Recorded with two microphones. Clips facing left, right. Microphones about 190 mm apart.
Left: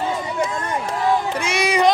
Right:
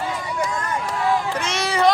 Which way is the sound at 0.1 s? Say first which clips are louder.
Left 2 dB; 25° left (ahead or behind).